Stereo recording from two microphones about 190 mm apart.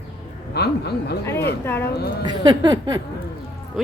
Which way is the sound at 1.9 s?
60° left (ahead or behind).